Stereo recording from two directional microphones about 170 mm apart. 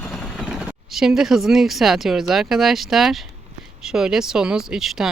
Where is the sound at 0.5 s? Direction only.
Centre (ahead or behind).